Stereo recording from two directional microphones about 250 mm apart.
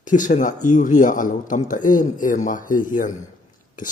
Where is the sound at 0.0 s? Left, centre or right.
Left.